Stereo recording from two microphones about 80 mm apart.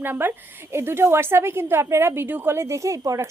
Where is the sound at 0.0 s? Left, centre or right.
Right.